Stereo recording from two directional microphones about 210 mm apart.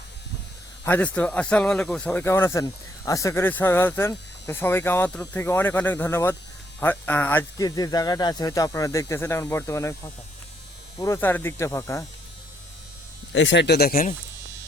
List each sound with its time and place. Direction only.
0.9 s speech: 5° left (ahead or behind)
13.3 s speech: 60° left (ahead or behind)